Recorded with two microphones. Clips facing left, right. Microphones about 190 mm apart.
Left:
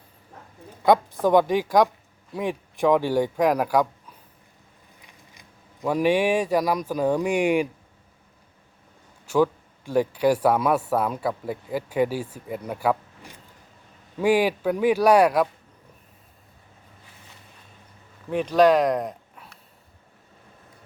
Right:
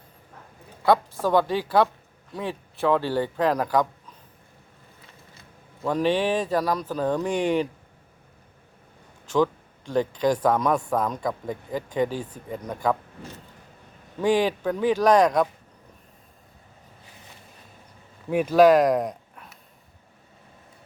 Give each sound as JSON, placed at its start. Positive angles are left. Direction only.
{"t": 0.8, "sound": "speech", "side_deg": 15}
{"t": 4.9, "sound": "speech", "side_deg": 15}
{"t": 9.2, "sound": "speech", "side_deg": 10}
{"t": 18.3, "sound": "speech", "side_deg": -10}